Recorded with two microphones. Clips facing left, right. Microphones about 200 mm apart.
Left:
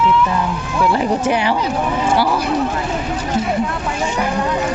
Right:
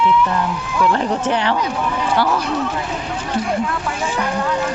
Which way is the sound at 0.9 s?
10° left (ahead or behind).